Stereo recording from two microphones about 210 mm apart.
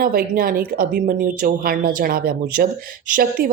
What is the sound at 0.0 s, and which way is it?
Speech, 45° right (ahead or behind).